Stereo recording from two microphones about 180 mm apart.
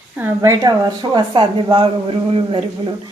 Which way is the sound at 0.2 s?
15° right (ahead or behind).